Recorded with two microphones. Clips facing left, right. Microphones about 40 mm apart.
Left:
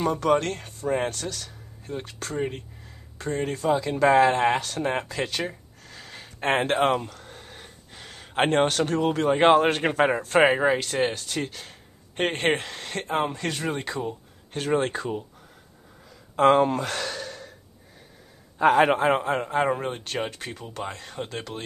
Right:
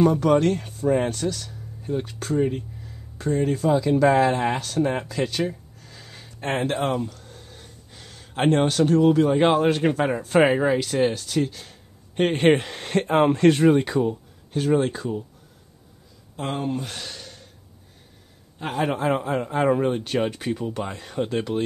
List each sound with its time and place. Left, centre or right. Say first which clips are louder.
0.0 s speech: right 4 dB; centre
2.3 s speech: right 7 dB; centre
6.5 s speech: left 2 dB; left
7.0 s gasp: right 5 dB; left
8.5 s speech: right 5 dB; centre
9.4 s speech: even; centre
10.2 s speech: right 3 dB; centre
12.7 s speech: right 7 dB; centre
13.7 s speech: right 10 dB; centre
14.9 s speech: right 1 dB; left
16.3 s speech: left 9 dB; left
18.9 s speech: left 1 dB; centre